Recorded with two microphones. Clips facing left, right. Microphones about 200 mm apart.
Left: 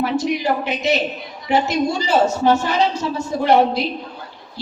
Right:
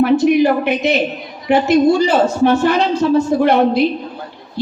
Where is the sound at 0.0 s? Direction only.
60° right (ahead or behind).